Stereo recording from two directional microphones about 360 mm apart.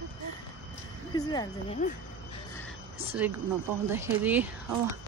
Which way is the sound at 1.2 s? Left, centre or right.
Centre.